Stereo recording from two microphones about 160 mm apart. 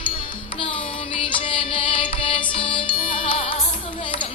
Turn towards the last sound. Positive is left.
turn(degrees=35)  # may be behind; listen again after turning